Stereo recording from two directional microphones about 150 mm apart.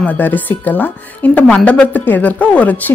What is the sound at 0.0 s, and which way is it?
Speech, 10° left (ahead or behind).